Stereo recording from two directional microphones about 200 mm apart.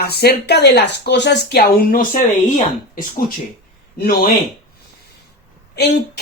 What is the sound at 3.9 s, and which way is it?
Speech, 45° left (ahead or behind).